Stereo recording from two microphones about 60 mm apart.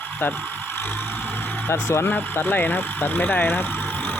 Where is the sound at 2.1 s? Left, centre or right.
Left.